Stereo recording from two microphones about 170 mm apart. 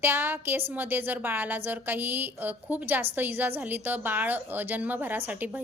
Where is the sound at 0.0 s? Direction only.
15° right (ahead or behind).